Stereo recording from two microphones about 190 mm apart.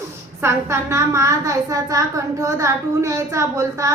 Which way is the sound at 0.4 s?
15° right (ahead or behind).